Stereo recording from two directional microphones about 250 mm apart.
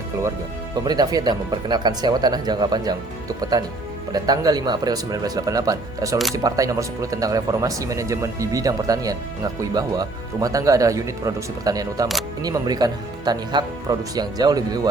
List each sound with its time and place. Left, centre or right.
0.9 s speech: centre
4.1 s speech: centre